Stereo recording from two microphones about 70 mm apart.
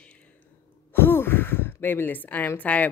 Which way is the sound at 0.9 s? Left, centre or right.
Left.